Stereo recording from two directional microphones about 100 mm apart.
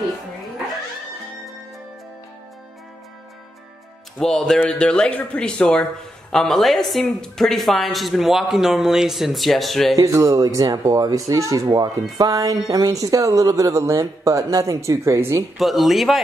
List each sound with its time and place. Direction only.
4.2 s a woman's voice: 5° left (ahead or behind)
9.9 s speech: 35° right (ahead or behind)
15.5 s a woman's voice: centre (ahead or behind)